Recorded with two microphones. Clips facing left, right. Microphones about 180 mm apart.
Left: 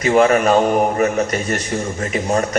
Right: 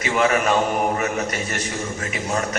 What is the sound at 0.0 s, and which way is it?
A man's voice, 40° left (ahead or behind).